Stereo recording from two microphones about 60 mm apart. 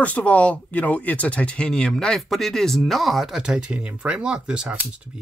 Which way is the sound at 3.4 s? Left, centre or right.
Centre.